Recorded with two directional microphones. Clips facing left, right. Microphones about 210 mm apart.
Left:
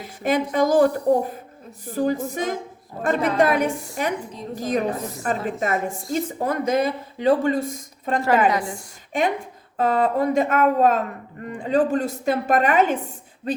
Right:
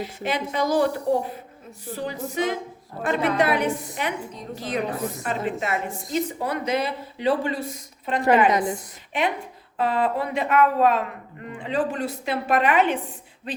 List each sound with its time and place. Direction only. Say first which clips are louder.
0.0 s a woman's voice: left 5 dB; 45° left (ahead or behind)
8.4 s a woman's voice: right 1 dB; 20° right (ahead or behind)
9.7 s a woman's voice: left 3 dB; 45° left (ahead or behind)